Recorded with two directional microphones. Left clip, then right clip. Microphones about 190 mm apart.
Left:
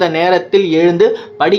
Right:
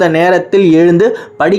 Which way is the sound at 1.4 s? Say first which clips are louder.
Right 1 dB; 25° right (ahead or behind).